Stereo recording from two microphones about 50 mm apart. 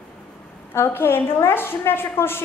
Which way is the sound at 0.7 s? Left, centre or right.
Left.